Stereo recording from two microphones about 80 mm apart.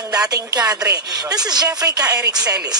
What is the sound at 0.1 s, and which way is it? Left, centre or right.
Speech, right.